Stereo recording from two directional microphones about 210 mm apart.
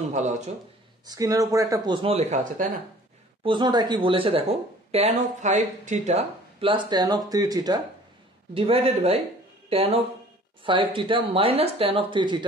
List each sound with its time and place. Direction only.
0.1 s speech: 35° right (ahead or behind)
1.0 s speech: 15° right (ahead or behind); by 2.7 s 35° right (ahead or behind)
3.4 s speech: 20° right (ahead or behind)